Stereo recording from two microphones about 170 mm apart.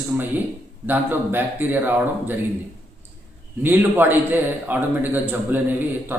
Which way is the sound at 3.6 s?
10° right (ahead or behind).